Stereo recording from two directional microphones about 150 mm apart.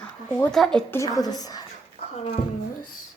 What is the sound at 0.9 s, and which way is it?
Speech, 20° left (ahead or behind).